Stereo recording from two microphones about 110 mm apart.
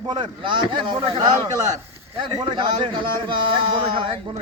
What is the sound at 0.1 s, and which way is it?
Speech, 45° right (ahead or behind).